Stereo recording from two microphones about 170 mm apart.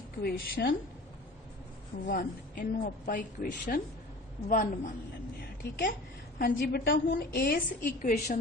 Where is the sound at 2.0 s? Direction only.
55° left (ahead or behind).